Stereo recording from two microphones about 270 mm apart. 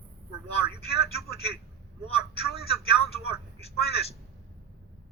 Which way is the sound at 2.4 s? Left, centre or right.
Right.